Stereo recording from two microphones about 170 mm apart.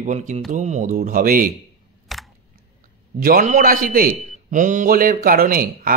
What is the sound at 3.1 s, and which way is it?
A man's voice, 55° right (ahead or behind).